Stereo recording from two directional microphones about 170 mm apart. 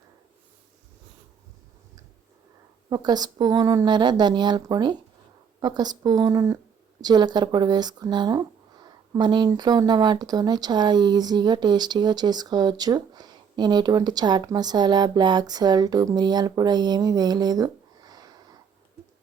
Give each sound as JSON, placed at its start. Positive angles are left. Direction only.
{"t": 2.9, "sound": "speech", "side_deg": -25}